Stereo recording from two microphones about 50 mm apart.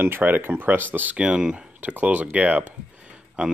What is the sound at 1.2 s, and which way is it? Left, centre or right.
Speech, centre.